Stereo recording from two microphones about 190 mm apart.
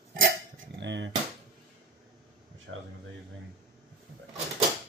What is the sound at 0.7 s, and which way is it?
Speech, 70° right (ahead or behind).